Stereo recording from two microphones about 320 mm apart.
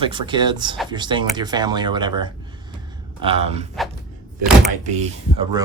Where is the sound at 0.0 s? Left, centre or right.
Centre.